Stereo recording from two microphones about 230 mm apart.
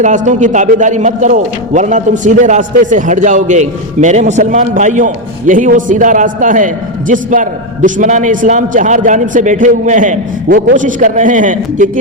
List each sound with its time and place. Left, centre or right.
0.0 s a man's voice: right